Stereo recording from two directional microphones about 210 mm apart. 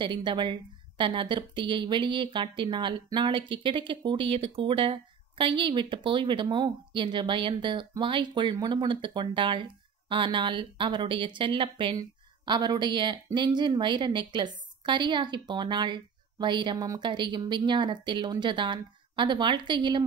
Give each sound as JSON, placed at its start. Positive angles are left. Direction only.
{"t": 0.0, "sound": "a woman's voice", "side_deg": -20}